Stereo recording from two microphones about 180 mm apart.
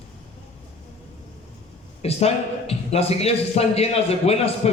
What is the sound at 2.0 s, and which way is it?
A man's voice, 35° left (ahead or behind).